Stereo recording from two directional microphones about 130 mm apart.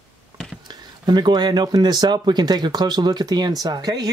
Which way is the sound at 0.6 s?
35° right (ahead or behind).